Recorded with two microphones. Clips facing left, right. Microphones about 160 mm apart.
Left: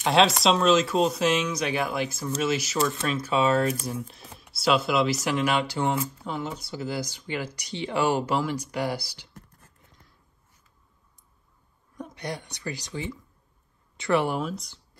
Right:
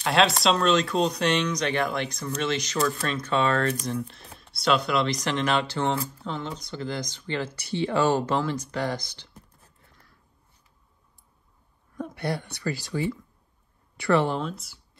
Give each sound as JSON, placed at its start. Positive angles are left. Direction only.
{"t": 0.0, "sound": "speech", "side_deg": 0}
{"t": 9.8, "sound": "a sound", "side_deg": 20}
{"t": 12.1, "sound": "speech", "side_deg": 20}
{"t": 14.5, "sound": "speech", "side_deg": -5}